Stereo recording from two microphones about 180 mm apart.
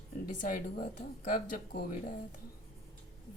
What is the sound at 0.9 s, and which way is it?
A woman's voice, 45° left (ahead or behind).